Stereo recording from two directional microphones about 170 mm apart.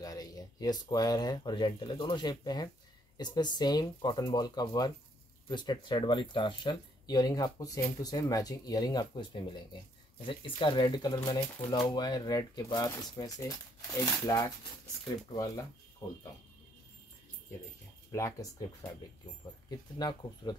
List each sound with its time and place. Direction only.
0.0 s speech: 20° left (ahead or behind)
18.1 s speech: 20° left (ahead or behind)